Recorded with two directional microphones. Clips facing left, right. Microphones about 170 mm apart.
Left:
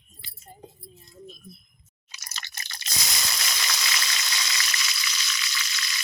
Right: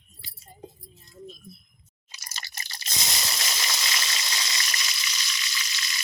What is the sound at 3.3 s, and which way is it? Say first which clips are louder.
Water: even; 25° right (ahead or behind).